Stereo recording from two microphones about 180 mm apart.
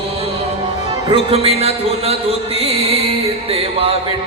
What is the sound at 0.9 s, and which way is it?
A man's voice, 30° right (ahead or behind).